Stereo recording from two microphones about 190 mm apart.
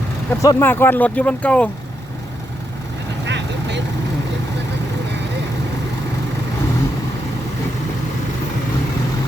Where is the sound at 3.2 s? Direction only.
65° right (ahead or behind).